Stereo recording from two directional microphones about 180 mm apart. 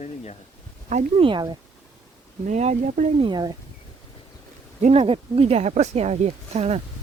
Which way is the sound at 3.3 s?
25° right (ahead or behind).